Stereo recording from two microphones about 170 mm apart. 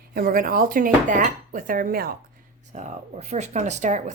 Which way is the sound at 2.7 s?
45° right (ahead or behind).